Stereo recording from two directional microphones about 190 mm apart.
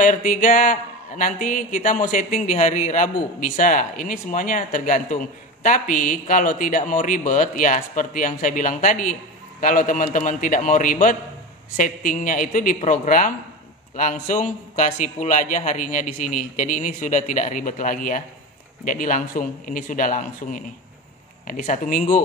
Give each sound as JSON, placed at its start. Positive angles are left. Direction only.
{"t": 0.0, "sound": "a man's voice", "side_deg": 45}